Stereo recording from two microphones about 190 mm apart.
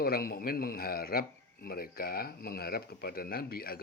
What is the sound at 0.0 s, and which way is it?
Speech, 55° left (ahead or behind).